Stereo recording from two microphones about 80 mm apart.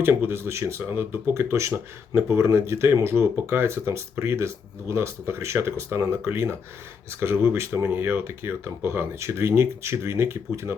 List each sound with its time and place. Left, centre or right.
0.0 s speech: right